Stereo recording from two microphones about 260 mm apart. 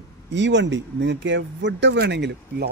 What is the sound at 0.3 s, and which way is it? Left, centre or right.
Speech, right.